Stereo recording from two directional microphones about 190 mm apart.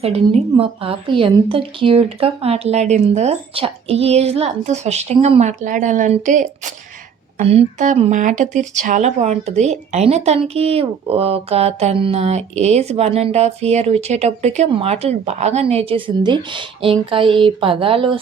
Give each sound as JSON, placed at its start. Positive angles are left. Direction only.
{"t": 0.0, "sound": "speech", "side_deg": -30}